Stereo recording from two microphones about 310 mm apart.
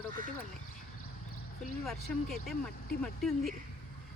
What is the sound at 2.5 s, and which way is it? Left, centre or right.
Speech, left.